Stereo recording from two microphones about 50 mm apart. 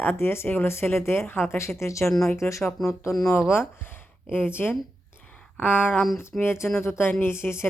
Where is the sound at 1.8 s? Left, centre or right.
Left.